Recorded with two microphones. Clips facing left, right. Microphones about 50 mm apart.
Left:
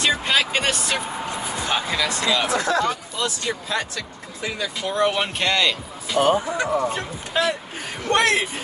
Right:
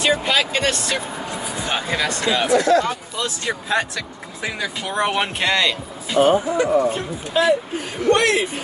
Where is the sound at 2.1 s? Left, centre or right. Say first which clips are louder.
Right 1 dB; right.